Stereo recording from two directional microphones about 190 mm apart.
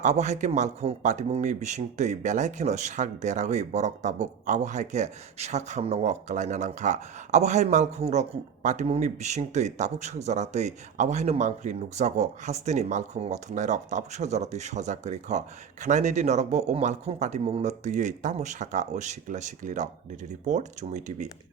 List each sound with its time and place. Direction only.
0.0 s speech: 40° right (ahead or behind)